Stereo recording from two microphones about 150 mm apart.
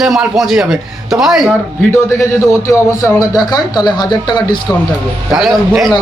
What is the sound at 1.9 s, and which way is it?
Speech, 20° left (ahead or behind).